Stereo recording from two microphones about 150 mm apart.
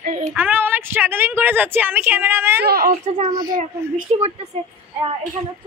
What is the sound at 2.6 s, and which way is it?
Speech, 90° right.